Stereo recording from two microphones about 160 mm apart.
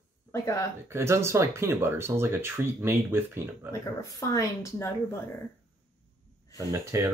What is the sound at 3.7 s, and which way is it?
Speech, 20° left (ahead or behind).